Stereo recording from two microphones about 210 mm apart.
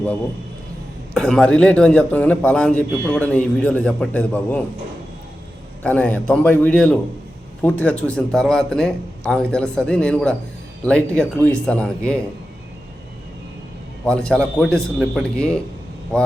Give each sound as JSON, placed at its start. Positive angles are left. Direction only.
{"t": 1.1, "sound": "a man's voice", "side_deg": 5}
{"t": 5.8, "sound": "a man's voice", "side_deg": 5}
{"t": 14.0, "sound": "a man's voice", "side_deg": 5}